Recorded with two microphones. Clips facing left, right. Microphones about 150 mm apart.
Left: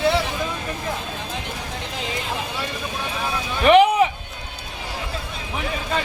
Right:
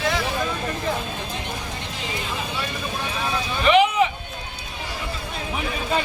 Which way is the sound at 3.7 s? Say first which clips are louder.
Left 4 dB; 50° left (ahead or behind).